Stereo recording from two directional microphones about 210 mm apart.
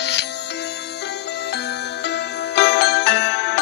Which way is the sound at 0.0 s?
55° left (ahead or behind).